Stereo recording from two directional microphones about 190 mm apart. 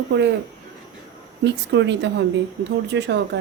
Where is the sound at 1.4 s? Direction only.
65° right (ahead or behind).